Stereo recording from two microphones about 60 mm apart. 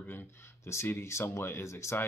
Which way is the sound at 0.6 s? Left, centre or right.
Left.